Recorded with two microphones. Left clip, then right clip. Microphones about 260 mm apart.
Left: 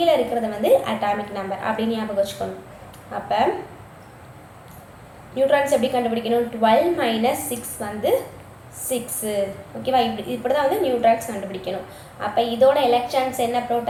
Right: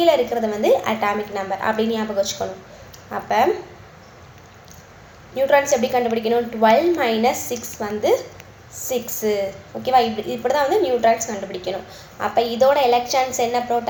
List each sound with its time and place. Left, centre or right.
0.0 s a woman's voice: right
5.3 s a woman's voice: right